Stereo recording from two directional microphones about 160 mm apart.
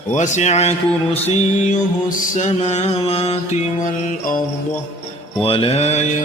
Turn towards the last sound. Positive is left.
turn(degrees=45)  # may be behind; listen again after turning